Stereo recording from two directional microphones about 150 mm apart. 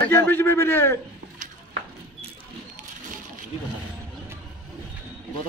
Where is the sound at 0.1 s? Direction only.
15° left (ahead or behind).